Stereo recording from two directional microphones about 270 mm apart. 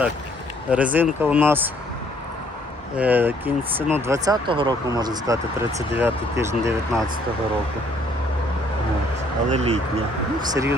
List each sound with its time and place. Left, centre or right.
0.7 s speech: centre
3.0 s speech: centre
9.5 s speech: right
10.5 s speech: centre